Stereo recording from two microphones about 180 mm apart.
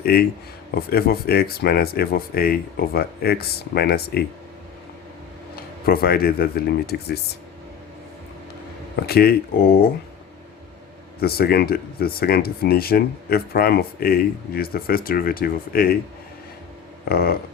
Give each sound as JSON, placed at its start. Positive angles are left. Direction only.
{"t": 0.0, "sound": "speech", "side_deg": 55}
{"t": 5.5, "sound": "speech", "side_deg": 55}
{"t": 9.0, "sound": "speech", "side_deg": 60}
{"t": 11.2, "sound": "speech", "side_deg": 60}
{"t": 17.1, "sound": "speech", "side_deg": 55}